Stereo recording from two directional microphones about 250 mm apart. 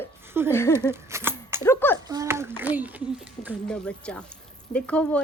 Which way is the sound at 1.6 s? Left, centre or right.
Centre.